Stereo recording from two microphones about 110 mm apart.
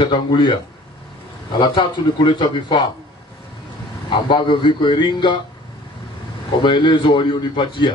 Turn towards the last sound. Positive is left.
turn(degrees=45)  # may be behind; listen again after turning